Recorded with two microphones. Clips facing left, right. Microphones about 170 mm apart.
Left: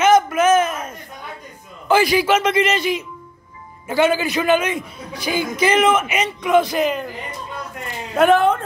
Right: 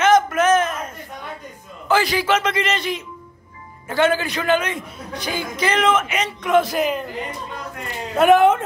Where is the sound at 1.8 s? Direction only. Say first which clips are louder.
Left 3 dB; 15° left (ahead or behind); by 7.0 s 5° right (ahead or behind).